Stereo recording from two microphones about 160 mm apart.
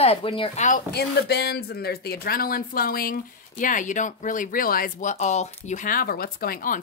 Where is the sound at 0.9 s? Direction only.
90° left; by 5.1 s 60° left (ahead or behind).